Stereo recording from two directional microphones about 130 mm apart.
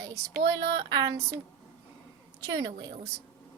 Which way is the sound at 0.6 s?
35° right (ahead or behind).